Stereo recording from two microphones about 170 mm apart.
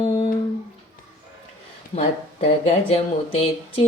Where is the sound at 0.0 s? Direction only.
30° left (ahead or behind).